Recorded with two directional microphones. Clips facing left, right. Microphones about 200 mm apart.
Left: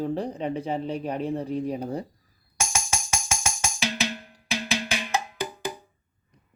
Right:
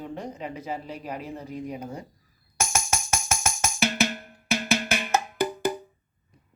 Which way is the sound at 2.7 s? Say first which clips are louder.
Right 3 dB; 55° right (ahead or behind).